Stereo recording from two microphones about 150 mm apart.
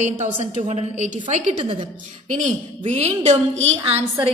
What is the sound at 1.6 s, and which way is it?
Speech, 35° right (ahead or behind).